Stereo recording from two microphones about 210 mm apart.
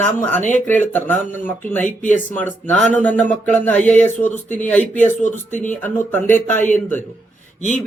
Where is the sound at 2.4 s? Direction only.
10° left (ahead or behind).